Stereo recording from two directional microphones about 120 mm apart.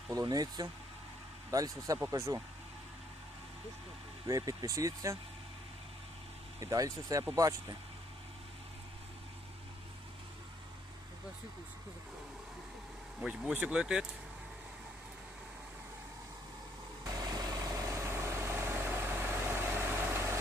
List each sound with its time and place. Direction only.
0.1 s speech: 30° right (ahead or behind)
4.3 s speech: 30° right (ahead or behind)
6.6 s speech: 30° right (ahead or behind)
13.1 s speech: 10° right (ahead or behind)
17.0 s vehicle: 30° right (ahead or behind)